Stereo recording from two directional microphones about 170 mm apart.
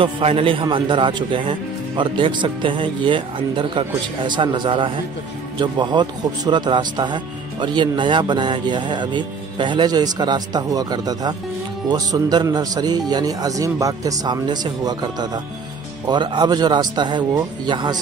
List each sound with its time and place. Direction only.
0.0 s a man's voice: 35° right (ahead or behind)